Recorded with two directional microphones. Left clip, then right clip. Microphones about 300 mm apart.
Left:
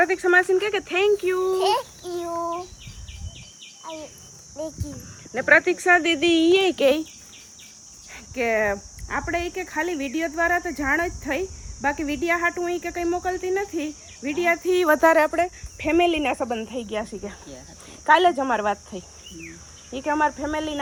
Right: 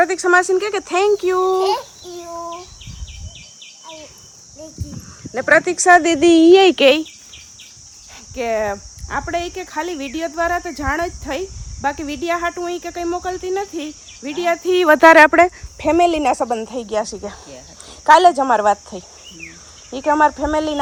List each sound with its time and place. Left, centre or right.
0.0 s speech: centre
1.6 s a child's voice: centre
5.3 s speech: centre; by 7.0 s right
8.4 s speech: centre; by 15.4 s right
15.8 s speech: centre